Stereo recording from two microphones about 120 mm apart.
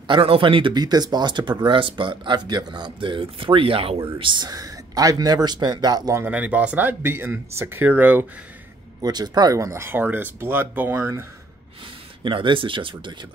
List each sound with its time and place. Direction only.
0.1 s speech: 45° right (ahead or behind); by 6.2 s 30° right (ahead or behind)
6.2 s speech: 15° right (ahead or behind)
9.0 s speech: 35° right (ahead or behind); by 11.2 s 20° right (ahead or behind)
12.2 s speech: 45° right (ahead or behind)